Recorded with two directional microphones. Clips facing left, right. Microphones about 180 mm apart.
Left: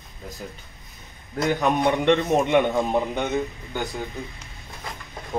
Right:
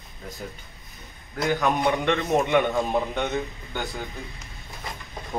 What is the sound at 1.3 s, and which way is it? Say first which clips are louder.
Speech: left 2 dB; 20° left (ahead or behind).